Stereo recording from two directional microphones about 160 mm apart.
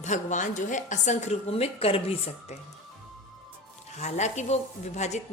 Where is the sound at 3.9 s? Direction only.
45° left (ahead or behind).